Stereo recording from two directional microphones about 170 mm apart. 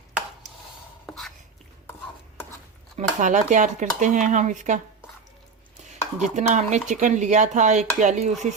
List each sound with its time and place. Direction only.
0.4 s a sound: 45° right (ahead or behind)
1.0 s writing: centre (ahead or behind)
3.0 s speech: 45° right (ahead or behind)
6.2 s speech: 45° right (ahead or behind)